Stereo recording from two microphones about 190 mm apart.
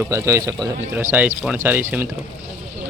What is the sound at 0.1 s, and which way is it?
Speech, 15° right (ahead or behind).